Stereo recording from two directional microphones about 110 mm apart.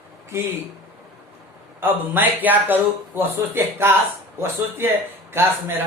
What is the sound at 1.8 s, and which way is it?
Speech, 15° right (ahead or behind).